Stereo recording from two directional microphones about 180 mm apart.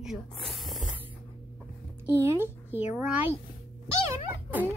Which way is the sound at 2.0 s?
10° right (ahead or behind).